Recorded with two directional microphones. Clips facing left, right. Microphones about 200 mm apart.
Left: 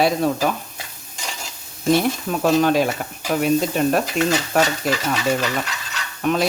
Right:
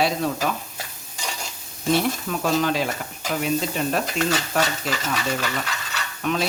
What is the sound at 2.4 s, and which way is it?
Speech, 50° left (ahead or behind).